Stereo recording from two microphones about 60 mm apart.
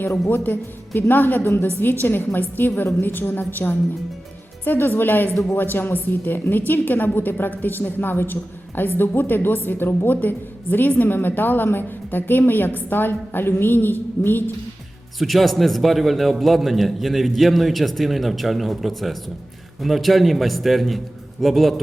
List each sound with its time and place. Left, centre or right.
0.3 s a woman's voice: left
15.2 s a man's voice: centre